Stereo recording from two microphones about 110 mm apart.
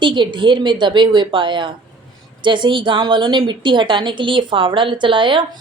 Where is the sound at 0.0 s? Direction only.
45° right (ahead or behind).